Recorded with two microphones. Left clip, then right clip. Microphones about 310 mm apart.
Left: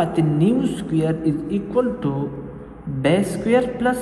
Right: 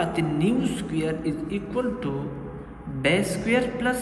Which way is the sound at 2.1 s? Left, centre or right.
Centre.